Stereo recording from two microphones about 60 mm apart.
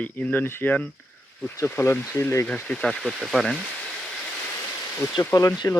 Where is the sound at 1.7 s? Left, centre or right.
Left.